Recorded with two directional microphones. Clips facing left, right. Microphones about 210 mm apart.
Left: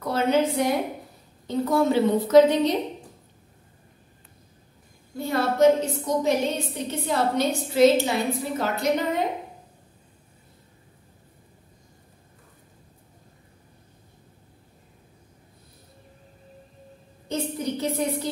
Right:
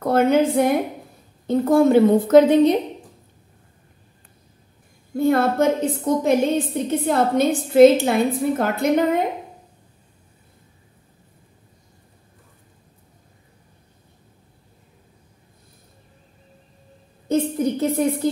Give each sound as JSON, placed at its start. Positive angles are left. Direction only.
{"t": 0.0, "sound": "a woman's voice", "side_deg": -50}
{"t": 5.1, "sound": "a woman's voice", "side_deg": -55}
{"t": 17.3, "sound": "a sound", "side_deg": -50}